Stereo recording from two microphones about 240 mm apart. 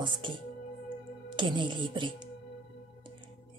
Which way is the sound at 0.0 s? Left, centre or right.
Centre.